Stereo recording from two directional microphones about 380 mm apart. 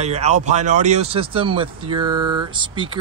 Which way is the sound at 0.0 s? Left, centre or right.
Centre.